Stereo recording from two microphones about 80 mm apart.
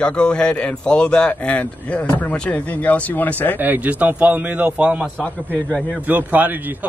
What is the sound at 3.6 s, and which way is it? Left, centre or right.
A man's voice, right.